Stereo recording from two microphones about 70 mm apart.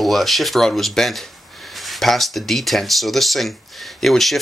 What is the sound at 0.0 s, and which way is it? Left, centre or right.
Speech, centre.